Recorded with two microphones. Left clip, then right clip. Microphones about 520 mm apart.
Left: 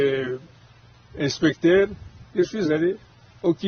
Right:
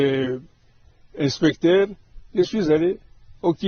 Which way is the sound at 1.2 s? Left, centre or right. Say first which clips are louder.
Right 1 dB; right.